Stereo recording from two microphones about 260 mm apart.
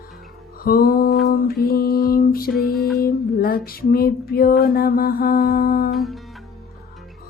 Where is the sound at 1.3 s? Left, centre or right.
Left.